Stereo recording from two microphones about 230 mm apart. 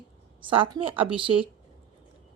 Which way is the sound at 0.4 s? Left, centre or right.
Right.